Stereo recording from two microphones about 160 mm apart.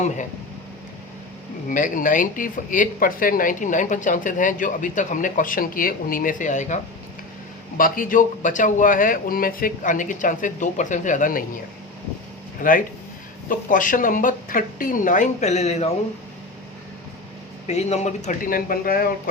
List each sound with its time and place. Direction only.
1.7 s speech: 55° left (ahead or behind)
7.8 s speech: 60° left (ahead or behind)
12.6 s speech: 60° left (ahead or behind); by 15.9 s 40° left (ahead or behind)
17.7 s speech: 45° left (ahead or behind); by 19.3 s 65° left (ahead or behind)